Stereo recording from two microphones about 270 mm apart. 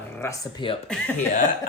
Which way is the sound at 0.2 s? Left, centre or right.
Centre.